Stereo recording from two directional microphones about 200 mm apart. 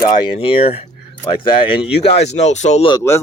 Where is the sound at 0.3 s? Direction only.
30° left (ahead or behind).